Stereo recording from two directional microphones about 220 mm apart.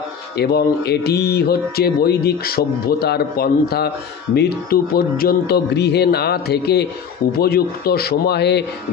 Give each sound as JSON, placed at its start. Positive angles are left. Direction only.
{"t": 0.4, "sound": "speech", "side_deg": 45}